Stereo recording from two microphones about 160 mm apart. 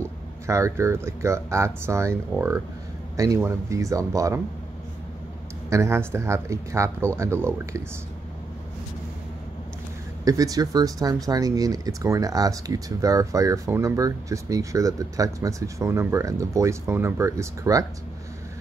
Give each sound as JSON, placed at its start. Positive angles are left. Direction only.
{"t": 0.0, "sound": "speech", "side_deg": -20}
{"t": 5.7, "sound": "speech", "side_deg": -15}
{"t": 10.2, "sound": "speech", "side_deg": -20}